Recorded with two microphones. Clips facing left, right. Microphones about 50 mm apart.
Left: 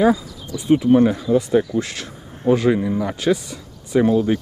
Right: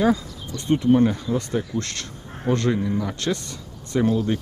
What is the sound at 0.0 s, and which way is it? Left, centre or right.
Speech, centre.